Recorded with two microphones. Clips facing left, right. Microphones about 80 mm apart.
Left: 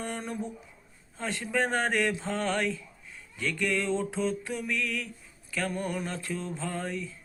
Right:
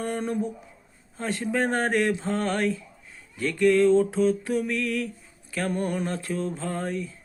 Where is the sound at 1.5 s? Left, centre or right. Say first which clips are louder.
Right 3 dB; right.